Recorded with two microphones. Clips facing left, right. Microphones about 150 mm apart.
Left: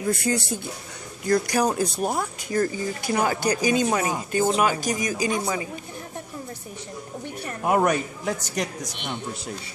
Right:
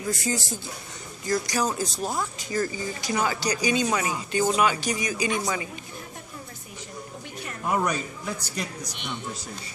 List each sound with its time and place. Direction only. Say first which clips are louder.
0.0 s a man's voice: left 4 dB; 60° left (ahead or behind); by 5.4 s 45° left (ahead or behind)
5.4 s speech: left 2 dB; 30° left (ahead or behind)
7.6 s a man's voice: left 5 dB; 55° left (ahead or behind)